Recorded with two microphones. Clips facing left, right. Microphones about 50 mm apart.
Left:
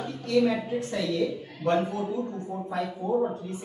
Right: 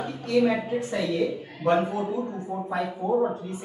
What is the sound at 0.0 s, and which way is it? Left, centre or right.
A woman's voice, centre.